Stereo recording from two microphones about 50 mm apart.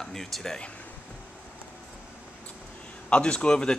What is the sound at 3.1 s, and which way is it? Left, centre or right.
Speech, centre.